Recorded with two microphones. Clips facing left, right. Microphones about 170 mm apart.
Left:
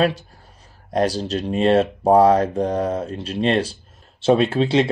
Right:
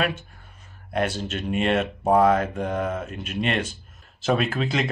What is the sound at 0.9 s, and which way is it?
Speech, 35° left (ahead or behind).